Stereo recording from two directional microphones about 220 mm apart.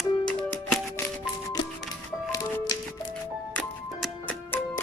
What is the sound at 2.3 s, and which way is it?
Music, 15° left (ahead or behind).